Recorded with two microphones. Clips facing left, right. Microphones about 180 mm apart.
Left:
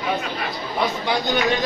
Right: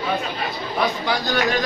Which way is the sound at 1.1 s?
20° left (ahead or behind).